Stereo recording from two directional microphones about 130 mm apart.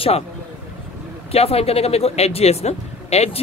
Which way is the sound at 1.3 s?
50° left (ahead or behind).